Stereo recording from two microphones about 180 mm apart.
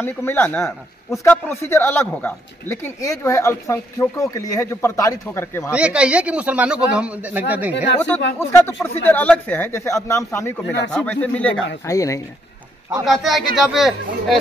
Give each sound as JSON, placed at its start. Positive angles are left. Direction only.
{"t": 0.0, "sound": "a man's voice", "side_deg": 10}
{"t": 5.7, "sound": "speech", "side_deg": -5}
{"t": 8.4, "sound": "a man's voice", "side_deg": 15}
{"t": 13.0, "sound": "speech", "side_deg": 0}